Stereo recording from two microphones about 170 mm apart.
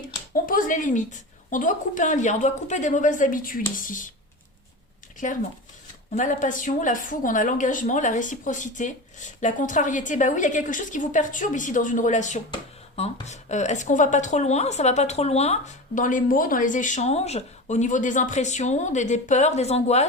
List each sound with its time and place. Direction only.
0.3 s a woman's voice: 55° left (ahead or behind)
5.1 s a woman's voice: 50° left (ahead or behind)